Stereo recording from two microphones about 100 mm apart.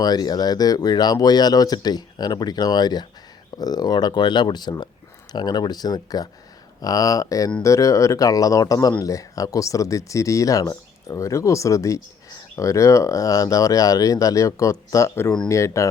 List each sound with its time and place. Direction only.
0.0 s speech: 40° left (ahead or behind)